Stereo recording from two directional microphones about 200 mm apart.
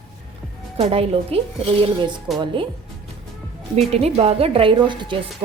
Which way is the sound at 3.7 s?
30° right (ahead or behind).